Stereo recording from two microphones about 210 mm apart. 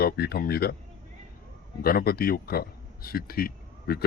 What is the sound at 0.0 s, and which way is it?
Speech, 50° left (ahead or behind).